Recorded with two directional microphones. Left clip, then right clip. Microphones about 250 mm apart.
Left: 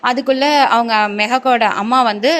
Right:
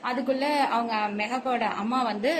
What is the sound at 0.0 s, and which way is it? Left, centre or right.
A woman's voice, left.